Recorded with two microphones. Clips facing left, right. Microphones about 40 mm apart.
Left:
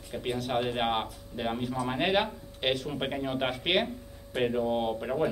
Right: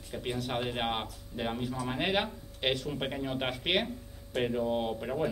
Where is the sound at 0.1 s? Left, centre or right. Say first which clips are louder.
Left 4 dB; centre.